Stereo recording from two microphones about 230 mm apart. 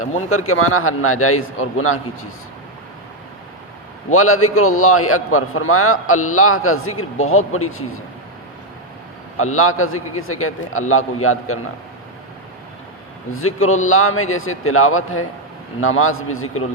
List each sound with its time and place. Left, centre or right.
0.0 s a man's voice: left
4.1 s a man's voice: left
9.4 s a man's voice: left
13.3 s a man's voice: left